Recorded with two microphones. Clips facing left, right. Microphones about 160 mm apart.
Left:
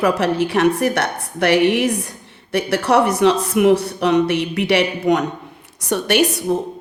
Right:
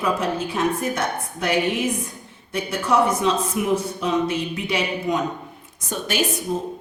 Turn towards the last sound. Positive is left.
turn(degrees=70)  # may be behind; listen again after turning